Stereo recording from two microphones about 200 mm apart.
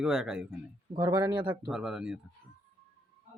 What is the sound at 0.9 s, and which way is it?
Speech, 20° right (ahead or behind).